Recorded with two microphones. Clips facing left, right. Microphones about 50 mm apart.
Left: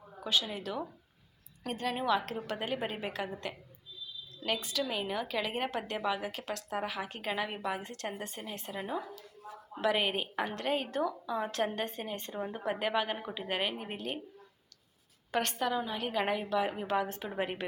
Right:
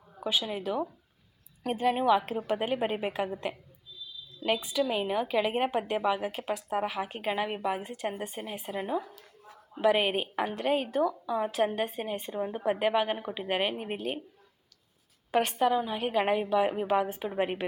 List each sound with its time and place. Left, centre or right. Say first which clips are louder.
0.2 s a woman's voice: right 2 dB; centre
15.3 s a woman's voice: right 6 dB; centre